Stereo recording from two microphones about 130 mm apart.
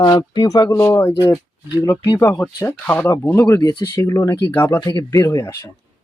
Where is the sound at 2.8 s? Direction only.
15° left (ahead or behind); by 4.1 s 30° left (ahead or behind).